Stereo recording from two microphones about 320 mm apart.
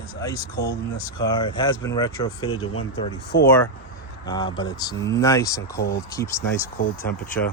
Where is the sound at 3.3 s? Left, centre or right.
Left.